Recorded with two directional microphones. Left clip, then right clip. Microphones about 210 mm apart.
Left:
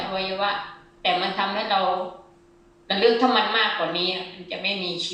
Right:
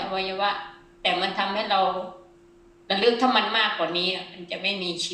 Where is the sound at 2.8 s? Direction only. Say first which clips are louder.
Left 2 dB; 30° right (ahead or behind).